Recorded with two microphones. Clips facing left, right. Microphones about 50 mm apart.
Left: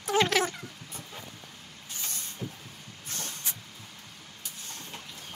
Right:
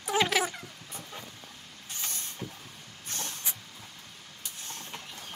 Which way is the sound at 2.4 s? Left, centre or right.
Centre.